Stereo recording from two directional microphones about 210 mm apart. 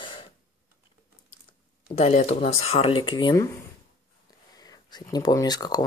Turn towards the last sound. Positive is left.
turn(degrees=20)  # may be behind; listen again after turning